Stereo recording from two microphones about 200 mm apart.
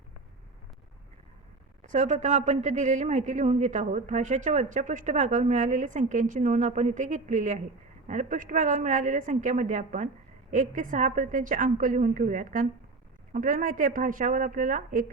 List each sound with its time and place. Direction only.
1.8 s a man's voice: 35° right (ahead or behind)